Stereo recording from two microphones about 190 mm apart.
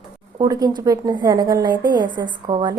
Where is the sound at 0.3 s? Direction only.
20° right (ahead or behind).